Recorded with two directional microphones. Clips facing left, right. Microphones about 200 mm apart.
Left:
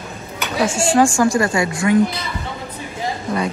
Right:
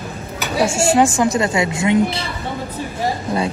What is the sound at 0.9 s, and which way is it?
Speech, 20° right (ahead or behind).